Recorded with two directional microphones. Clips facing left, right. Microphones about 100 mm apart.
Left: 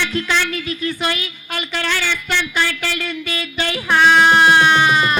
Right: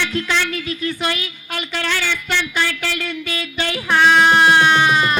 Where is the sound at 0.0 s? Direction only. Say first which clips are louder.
Left 1 dB; 20° left (ahead or behind).